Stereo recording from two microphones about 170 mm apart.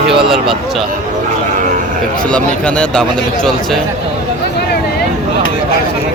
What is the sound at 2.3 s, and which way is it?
Speech, 5° left (ahead or behind).